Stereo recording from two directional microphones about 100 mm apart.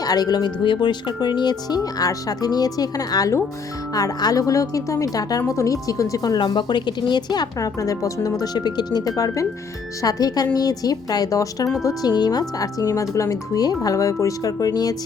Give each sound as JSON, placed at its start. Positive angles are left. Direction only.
{"t": 0.0, "sound": "speech", "side_deg": 40}